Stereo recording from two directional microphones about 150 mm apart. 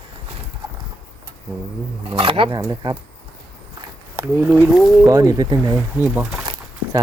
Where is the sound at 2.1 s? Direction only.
35° right (ahead or behind).